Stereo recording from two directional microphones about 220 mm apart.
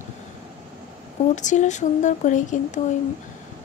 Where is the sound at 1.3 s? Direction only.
35° left (ahead or behind).